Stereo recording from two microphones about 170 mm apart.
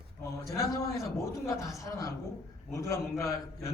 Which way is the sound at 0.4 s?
20° left (ahead or behind).